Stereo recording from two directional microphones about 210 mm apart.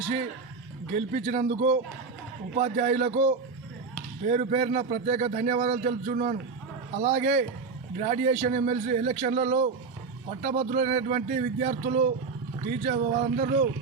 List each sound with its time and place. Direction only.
0.9 s a man's voice: 35° right (ahead or behind)